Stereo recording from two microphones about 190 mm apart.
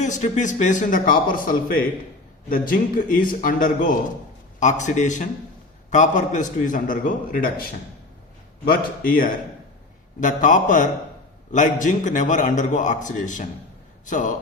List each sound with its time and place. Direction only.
0.0 s a man's voice: 40° left (ahead or behind)